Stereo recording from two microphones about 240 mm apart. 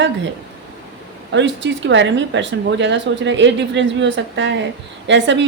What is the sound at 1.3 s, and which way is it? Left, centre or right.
A woman's voice, right.